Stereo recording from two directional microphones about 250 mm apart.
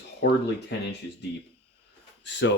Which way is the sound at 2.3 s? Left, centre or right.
Left.